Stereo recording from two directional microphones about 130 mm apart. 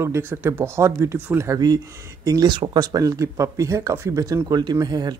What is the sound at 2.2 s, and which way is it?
Speech, 30° right (ahead or behind).